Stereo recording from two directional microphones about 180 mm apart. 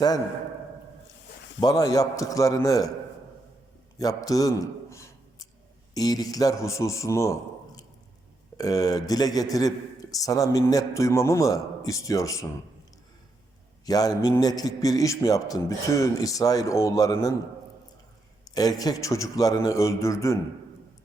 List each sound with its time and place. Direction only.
1.6 s a man's voice: 20° left (ahead or behind)
3.9 s a sound: 20° left (ahead or behind)
5.9 s a man's voice: 20° left (ahead or behind)
13.8 s a man's voice: 20° left (ahead or behind)
18.4 s a man's voice: 20° left (ahead or behind)